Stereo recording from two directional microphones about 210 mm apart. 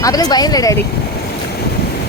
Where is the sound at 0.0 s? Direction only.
15° left (ahead or behind).